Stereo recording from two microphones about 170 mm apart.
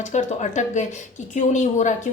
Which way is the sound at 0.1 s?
45° left (ahead or behind).